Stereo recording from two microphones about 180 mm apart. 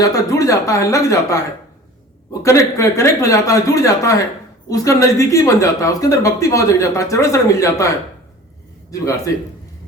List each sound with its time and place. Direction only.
0.0 s speech: 20° left (ahead or behind)
2.4 s speech: 15° left (ahead or behind)
8.9 s speech: 15° left (ahead or behind)